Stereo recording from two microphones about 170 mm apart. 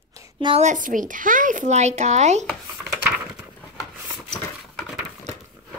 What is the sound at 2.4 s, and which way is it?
Typing, centre (ahead or behind).